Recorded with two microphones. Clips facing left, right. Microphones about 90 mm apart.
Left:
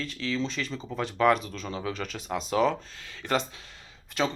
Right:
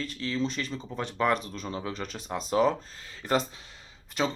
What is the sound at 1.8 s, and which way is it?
Speech, 30° right (ahead or behind).